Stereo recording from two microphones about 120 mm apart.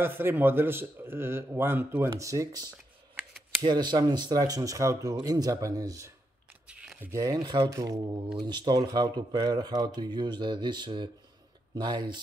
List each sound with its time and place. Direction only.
0.0 s speech: 20° right (ahead or behind)
6.7 s a sound: 10° right (ahead or behind)
7.1 s speech: 30° right (ahead or behind)